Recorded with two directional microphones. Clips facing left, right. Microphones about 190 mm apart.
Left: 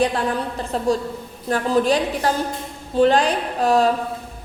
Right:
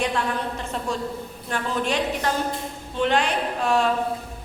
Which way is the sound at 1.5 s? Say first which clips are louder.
Left 8 dB; 35° left (ahead or behind).